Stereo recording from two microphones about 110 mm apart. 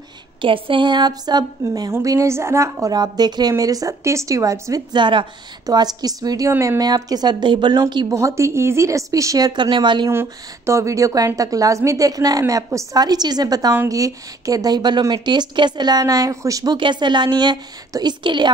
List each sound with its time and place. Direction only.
0.4 s a woman's voice: 50° right (ahead or behind)
1.6 s a woman's voice: 25° right (ahead or behind)
4.9 s a woman's voice: 45° right (ahead or behind)
8.1 s a woman's voice: 25° right (ahead or behind)
9.5 s a woman's voice: 45° right (ahead or behind)
10.0 s a woman's voice: 25° right (ahead or behind)
16.7 s a woman's voice: 45° right (ahead or behind)